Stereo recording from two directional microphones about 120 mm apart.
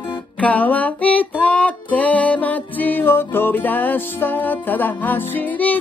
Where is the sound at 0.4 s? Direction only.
15° left (ahead or behind).